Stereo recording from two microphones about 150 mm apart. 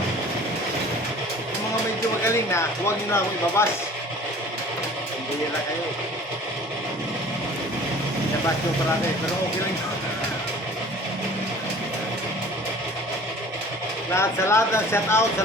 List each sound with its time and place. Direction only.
2.2 s speech: 20° left (ahead or behind)
14.2 s speech: 15° left (ahead or behind)